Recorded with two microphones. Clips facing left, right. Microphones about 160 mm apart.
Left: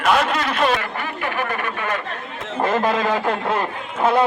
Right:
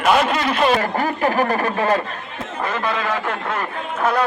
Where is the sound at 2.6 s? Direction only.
40° left (ahead or behind).